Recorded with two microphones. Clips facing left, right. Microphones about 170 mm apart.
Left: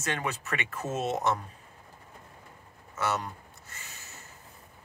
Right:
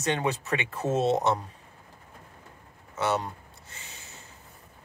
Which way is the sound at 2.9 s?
20° right (ahead or behind).